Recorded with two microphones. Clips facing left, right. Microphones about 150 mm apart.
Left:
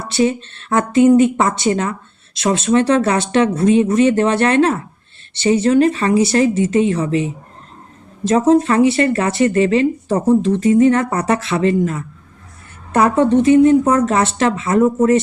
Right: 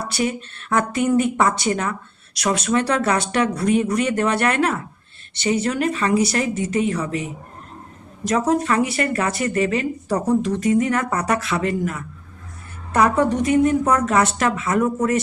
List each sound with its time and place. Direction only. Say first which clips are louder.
0.1 s speech: left 10 dB; 25° left (ahead or behind)